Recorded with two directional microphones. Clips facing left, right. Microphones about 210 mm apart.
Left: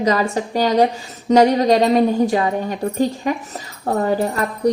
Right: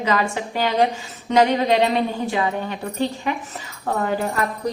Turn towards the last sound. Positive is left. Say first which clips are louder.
# left 5 dB
turn(degrees=40)  # may be behind; listen again after turning